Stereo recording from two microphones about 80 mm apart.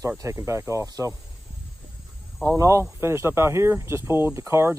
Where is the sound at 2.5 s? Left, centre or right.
Right.